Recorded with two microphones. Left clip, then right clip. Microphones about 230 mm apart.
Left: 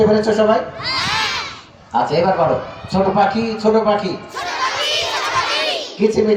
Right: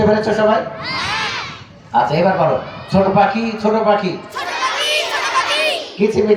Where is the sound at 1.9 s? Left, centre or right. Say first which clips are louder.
Right 1 dB; right.